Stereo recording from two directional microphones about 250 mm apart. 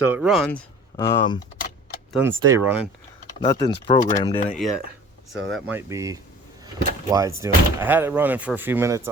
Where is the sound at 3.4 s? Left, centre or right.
Centre.